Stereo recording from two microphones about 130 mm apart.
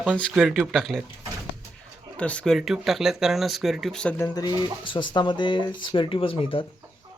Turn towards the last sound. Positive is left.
turn(degrees=45)  # may be behind; listen again after turning